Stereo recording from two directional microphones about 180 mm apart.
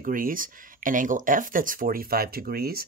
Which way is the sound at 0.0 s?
50° right (ahead or behind).